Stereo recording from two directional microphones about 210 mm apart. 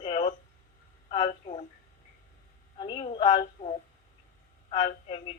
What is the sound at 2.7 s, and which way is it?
A woman's voice, 20° left (ahead or behind).